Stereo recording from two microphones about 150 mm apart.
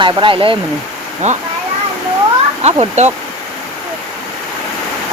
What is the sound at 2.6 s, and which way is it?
Speech, 45° right (ahead or behind).